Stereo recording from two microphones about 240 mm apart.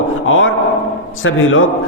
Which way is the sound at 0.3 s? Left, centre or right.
Left.